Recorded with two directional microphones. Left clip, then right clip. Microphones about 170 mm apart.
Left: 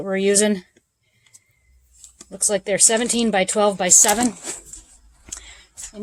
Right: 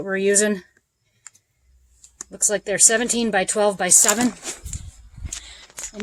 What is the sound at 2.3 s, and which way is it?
A woman's voice, 10° left (ahead or behind).